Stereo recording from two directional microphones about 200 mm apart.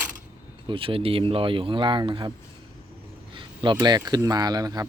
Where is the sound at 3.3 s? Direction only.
25° right (ahead or behind).